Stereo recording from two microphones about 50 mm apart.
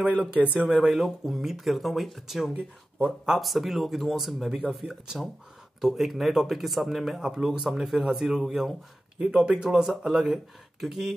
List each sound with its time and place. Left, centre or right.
0.3 s speech: right
0.7 s speech: centre